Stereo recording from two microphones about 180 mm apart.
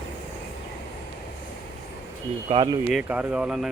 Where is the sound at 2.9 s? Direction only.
5° right (ahead or behind).